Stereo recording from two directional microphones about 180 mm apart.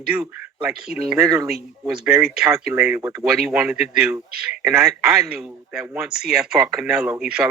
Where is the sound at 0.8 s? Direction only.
55° right (ahead or behind).